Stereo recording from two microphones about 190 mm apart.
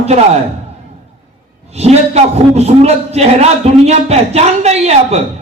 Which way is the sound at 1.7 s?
35° right (ahead or behind).